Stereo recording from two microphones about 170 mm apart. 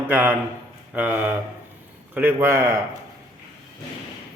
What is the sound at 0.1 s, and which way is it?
Speech, 10° right (ahead or behind).